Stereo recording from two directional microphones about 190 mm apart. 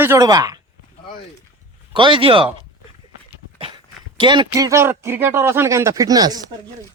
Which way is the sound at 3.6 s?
25° right (ahead or behind).